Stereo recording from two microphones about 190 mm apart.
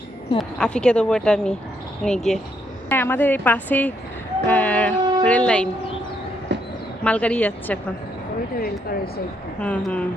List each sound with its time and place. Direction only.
0.3 s speech: 5° left (ahead or behind)
4.4 s music: 10° left (ahead or behind)
6.5 s train: 65° right (ahead or behind)
7.0 s speech: 5° left (ahead or behind)
8.5 s speech: 50° left (ahead or behind)
9.6 s speech: 5° left (ahead or behind)